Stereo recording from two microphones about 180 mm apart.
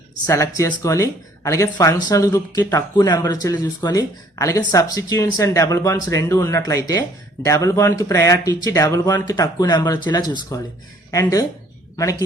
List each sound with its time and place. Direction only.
0.3 s speech: 15° left (ahead or behind)